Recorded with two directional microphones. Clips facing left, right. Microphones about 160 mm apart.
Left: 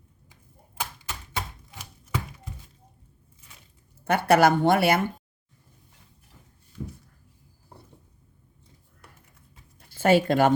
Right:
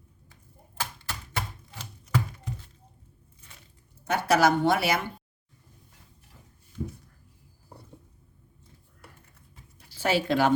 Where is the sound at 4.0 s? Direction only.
55° left (ahead or behind).